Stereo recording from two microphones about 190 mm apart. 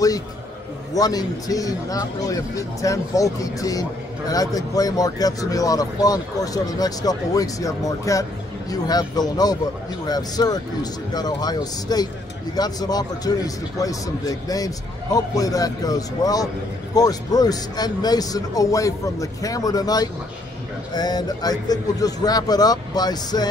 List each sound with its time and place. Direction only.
0.9 s a man's voice: 20° left (ahead or behind)